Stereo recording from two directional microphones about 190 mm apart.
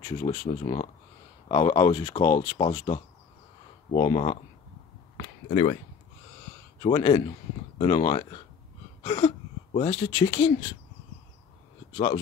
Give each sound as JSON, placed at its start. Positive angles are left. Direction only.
{"t": 0.0, "sound": "speech", "side_deg": 25}
{"t": 6.8, "sound": "speech", "side_deg": 25}
{"t": 9.0, "sound": "a sound", "side_deg": 25}
{"t": 9.8, "sound": "speech", "side_deg": 25}